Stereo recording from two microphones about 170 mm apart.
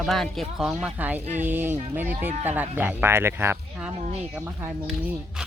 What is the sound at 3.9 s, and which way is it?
Speech, 35° right (ahead or behind).